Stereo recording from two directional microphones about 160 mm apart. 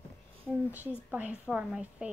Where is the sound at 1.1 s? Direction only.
10° right (ahead or behind).